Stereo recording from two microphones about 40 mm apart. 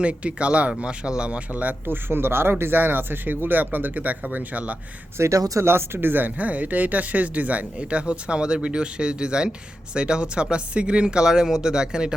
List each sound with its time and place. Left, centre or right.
0.0 s speech: right
1.9 s speech: right
5.6 s speech: right
6.3 s speech: right; by 12.1 s centre